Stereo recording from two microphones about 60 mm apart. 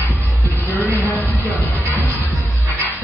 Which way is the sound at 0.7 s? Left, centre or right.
Left.